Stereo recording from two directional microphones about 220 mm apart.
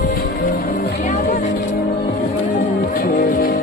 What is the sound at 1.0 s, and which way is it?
Music, 35° left (ahead or behind).